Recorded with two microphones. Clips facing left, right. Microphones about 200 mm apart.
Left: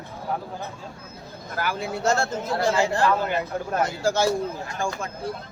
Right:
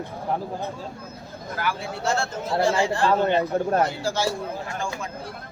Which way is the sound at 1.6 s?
40° left (ahead or behind).